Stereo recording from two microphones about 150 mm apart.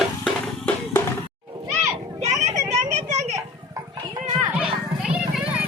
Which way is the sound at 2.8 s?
50° right (ahead or behind).